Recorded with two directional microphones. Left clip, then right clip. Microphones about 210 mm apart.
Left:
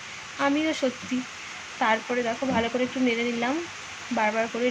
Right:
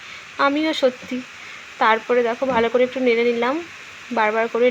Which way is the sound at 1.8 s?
20° right (ahead or behind).